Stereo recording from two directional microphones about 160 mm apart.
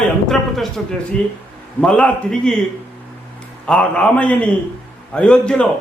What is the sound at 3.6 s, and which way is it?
A man's voice, 5° left (ahead or behind).